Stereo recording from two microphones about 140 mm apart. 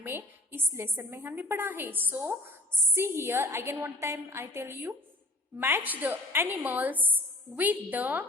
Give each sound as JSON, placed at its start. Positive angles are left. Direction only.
{"t": 0.0, "sound": "a woman's voice", "side_deg": -15}